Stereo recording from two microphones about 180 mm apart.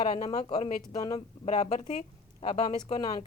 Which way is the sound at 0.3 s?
35° left (ahead or behind).